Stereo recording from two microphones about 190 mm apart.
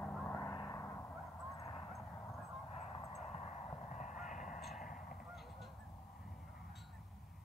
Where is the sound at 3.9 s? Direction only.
40° left (ahead or behind).